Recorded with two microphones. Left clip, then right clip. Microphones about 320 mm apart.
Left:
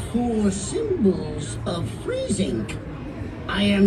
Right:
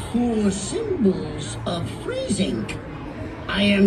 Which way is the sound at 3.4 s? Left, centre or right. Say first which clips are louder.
Right 2 dB; centre.